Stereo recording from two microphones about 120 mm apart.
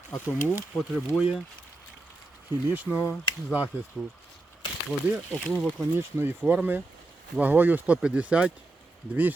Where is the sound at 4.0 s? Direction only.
5° left (ahead or behind).